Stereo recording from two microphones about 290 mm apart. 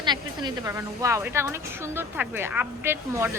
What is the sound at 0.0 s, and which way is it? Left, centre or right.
A woman's voice, centre.